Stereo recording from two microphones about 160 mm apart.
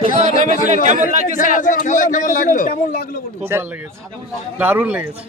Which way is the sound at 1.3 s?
55° left (ahead or behind).